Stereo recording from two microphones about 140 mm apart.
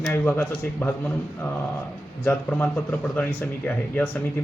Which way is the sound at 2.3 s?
10° left (ahead or behind).